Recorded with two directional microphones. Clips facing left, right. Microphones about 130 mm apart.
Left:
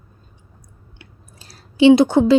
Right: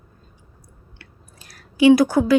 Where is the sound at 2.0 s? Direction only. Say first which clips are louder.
Left 3 dB; 25° left (ahead or behind).